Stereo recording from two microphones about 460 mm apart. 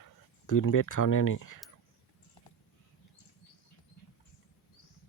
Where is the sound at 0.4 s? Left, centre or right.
Left.